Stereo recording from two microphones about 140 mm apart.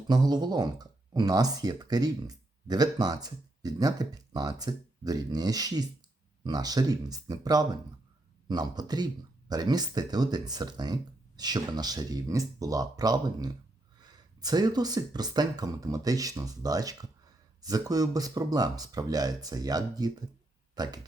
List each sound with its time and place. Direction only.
0.1 s speech: 30° right (ahead or behind)